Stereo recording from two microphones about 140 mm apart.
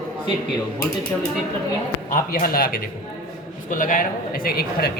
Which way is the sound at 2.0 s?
90° left.